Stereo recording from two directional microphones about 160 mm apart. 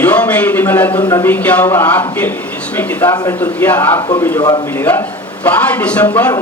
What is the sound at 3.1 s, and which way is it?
Speech, 25° left (ahead or behind).